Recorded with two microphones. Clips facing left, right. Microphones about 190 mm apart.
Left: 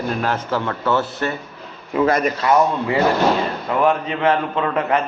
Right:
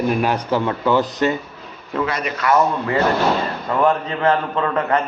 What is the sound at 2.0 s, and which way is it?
Speech, 45° left (ahead or behind).